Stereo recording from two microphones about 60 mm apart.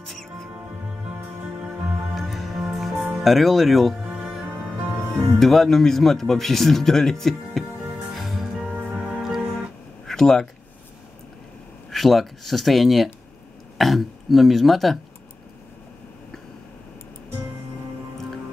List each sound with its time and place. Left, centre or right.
0.1 s music: centre
2.1 s music: centre
4.5 s music: right
5.4 s speech: centre
8.1 s music: centre
8.6 s music: right
9.1 s music: centre
10.0 s a sound: centre
11.9 s speech: centre